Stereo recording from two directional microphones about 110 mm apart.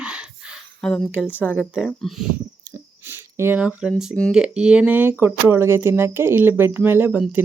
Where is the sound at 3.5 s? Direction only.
10° right (ahead or behind).